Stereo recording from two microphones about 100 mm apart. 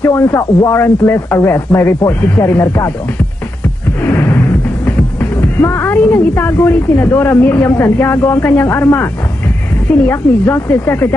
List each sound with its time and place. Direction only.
0.0 s a woman's voice: 25° left (ahead or behind)
5.4 s a woman's voice: 25° left (ahead or behind)
10.1 s a woman's voice: 20° left (ahead or behind)